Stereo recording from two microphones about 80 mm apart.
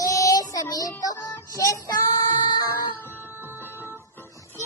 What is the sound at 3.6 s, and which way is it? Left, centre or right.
Music, right.